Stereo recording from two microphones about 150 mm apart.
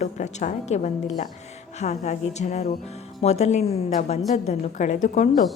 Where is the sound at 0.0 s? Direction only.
50° left (ahead or behind).